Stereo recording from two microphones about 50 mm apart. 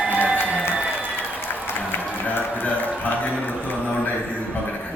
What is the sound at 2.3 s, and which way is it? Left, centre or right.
Music, left.